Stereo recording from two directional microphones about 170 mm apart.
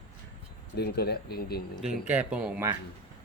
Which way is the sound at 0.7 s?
70° left (ahead or behind).